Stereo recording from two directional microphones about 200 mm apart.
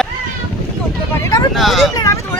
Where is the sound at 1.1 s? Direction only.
15° left (ahead or behind).